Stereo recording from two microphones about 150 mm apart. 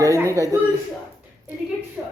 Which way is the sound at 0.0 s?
20° right (ahead or behind).